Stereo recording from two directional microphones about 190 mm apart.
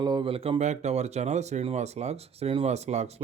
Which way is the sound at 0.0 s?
25° right (ahead or behind).